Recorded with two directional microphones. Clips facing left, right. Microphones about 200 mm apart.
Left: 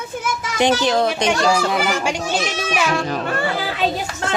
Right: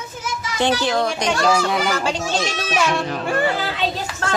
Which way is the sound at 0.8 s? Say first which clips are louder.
Left 2 dB; 20° left (ahead or behind).